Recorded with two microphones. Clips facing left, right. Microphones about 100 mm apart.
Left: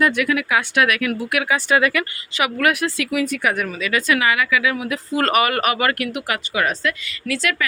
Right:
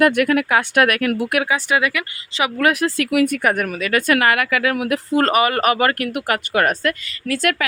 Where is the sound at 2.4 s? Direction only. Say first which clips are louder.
Right 1 dB; 30° right (ahead or behind).